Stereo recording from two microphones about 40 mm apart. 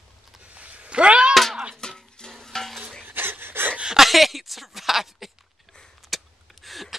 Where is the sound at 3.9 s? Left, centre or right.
Centre.